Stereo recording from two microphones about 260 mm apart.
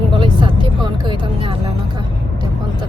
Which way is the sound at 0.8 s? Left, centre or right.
Centre.